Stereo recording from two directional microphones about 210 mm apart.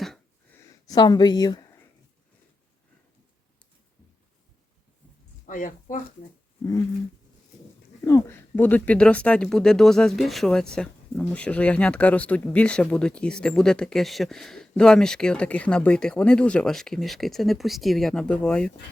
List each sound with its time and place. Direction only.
0.9 s speech: 20° left (ahead or behind)
5.5 s a woman's voice: 40° left (ahead or behind)
8.0 s speech: 15° left (ahead or behind)